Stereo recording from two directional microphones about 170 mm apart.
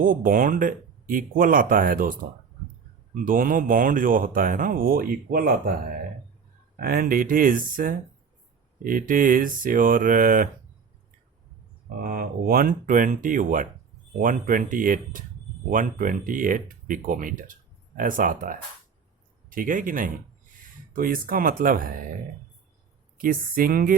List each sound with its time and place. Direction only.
0.0 s speech: 55° right (ahead or behind)
3.2 s speech: 55° right (ahead or behind)
6.7 s speech: 60° right (ahead or behind)
12.0 s speech: 55° right (ahead or behind)
23.1 s speech: 55° right (ahead or behind)